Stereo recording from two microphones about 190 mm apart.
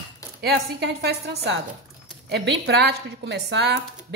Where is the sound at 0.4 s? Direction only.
60° right (ahead or behind).